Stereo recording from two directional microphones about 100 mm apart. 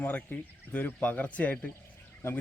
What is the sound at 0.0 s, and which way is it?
Speech, 15° left (ahead or behind).